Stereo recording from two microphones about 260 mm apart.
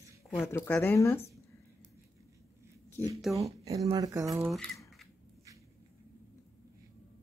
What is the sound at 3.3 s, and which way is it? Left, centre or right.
Speech, centre.